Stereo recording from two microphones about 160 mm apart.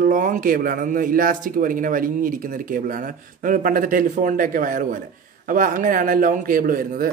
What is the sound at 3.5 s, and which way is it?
A man's voice, 60° right (ahead or behind).